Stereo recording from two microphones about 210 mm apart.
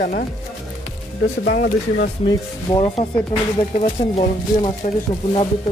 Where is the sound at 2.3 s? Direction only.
25° left (ahead or behind).